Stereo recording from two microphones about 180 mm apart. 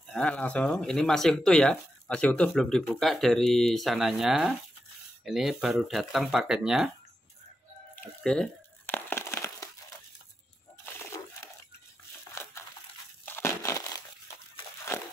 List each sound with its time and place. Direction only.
0.0 s speech: 5° left (ahead or behind)
8.2 s a sound: 5° left (ahead or behind)
13.2 s crushing: 15° left (ahead or behind)